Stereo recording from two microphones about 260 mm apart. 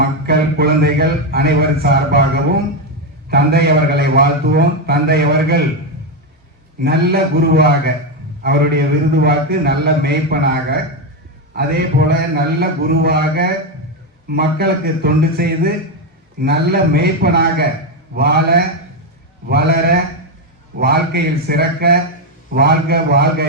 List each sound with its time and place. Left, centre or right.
0.0 s a man's voice: right
6.8 s a man's voice: right